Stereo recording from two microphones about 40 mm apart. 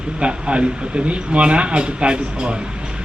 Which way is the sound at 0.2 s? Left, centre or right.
Right.